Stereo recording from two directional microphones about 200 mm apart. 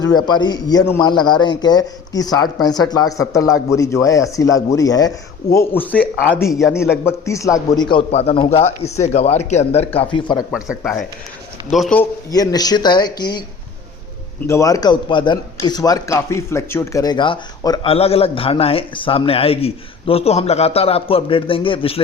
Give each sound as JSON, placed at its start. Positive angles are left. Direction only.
{"t": 0.0, "sound": "a man's voice", "side_deg": 20}
{"t": 6.9, "sound": "a man's voice", "side_deg": 15}
{"t": 10.5, "sound": "speech", "side_deg": 0}
{"t": 12.3, "sound": "a man's voice", "side_deg": 20}
{"t": 14.4, "sound": "a man's voice", "side_deg": 15}